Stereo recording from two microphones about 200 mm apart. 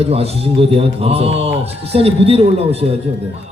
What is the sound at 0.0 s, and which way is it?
A man's voice, 30° right (ahead or behind).